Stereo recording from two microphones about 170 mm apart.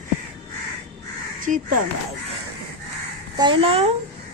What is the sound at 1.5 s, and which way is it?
Speech, 50° right (ahead or behind).